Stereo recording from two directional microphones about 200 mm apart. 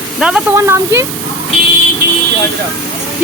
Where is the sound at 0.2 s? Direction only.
5° right (ahead or behind).